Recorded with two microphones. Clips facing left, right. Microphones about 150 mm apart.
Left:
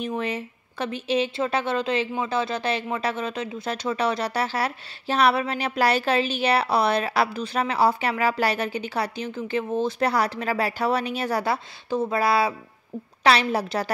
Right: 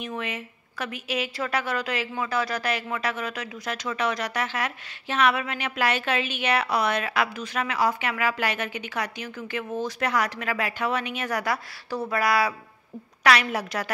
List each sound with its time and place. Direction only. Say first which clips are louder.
0.0 s a woman's voice: left 5 dB; 35° left (ahead or behind)